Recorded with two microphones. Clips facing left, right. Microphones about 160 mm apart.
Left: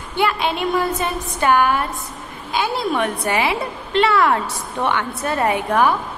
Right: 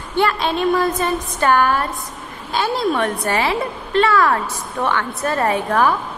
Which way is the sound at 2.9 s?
10° left (ahead or behind).